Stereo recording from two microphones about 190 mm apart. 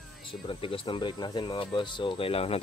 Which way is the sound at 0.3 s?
30° left (ahead or behind).